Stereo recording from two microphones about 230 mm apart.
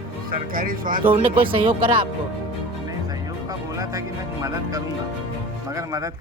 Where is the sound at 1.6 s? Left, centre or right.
Right.